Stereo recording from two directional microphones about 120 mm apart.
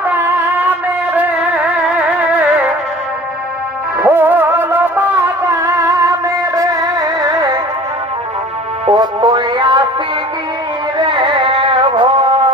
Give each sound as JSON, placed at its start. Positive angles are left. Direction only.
{"t": 0.0, "sound": "music", "side_deg": -15}
{"t": 4.0, "sound": "music", "side_deg": -15}
{"t": 8.9, "sound": "music", "side_deg": -35}
{"t": 11.0, "sound": "music", "side_deg": -40}